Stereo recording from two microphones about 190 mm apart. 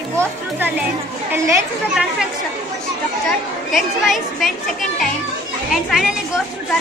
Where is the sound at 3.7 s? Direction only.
Centre (ahead or behind).